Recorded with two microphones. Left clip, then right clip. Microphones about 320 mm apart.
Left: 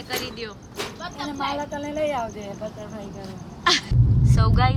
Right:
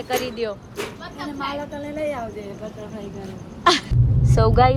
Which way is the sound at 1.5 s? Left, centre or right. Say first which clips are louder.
Left 1 dB; left.